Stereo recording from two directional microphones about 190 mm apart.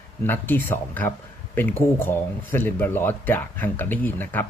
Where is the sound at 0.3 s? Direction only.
10° left (ahead or behind).